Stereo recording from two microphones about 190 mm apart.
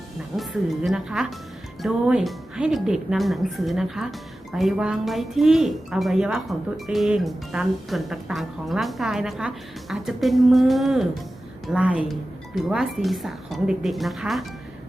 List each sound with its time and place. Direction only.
0.3 s speech: centre (ahead or behind)